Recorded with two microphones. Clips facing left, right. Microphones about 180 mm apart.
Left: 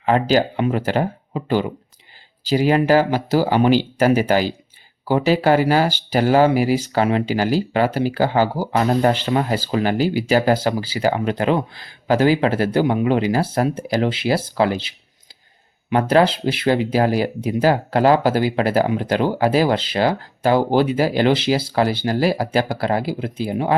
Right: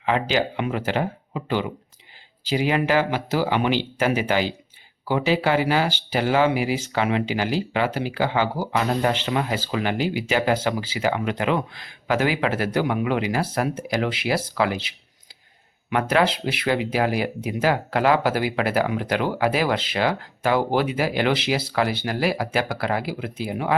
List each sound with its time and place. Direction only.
0.0 s speech: 40° left (ahead or behind)